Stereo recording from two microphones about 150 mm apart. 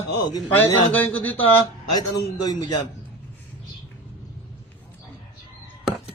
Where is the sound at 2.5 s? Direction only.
25° left (ahead or behind).